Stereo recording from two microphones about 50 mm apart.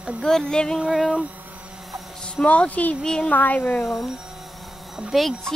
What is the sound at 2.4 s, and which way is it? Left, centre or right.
Speech, left.